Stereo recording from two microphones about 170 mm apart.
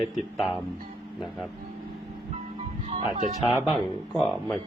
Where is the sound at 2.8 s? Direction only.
40° right (ahead or behind).